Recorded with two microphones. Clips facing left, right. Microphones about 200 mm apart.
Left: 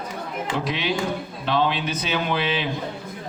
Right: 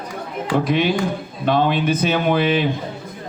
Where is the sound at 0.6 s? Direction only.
50° right (ahead or behind).